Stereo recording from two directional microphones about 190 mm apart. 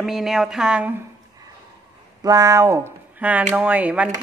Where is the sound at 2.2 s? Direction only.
20° right (ahead or behind).